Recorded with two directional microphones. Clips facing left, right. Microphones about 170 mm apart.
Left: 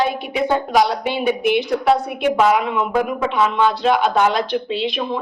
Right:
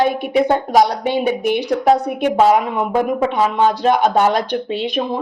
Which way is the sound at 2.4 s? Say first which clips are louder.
Right 3 dB; 40° right (ahead or behind).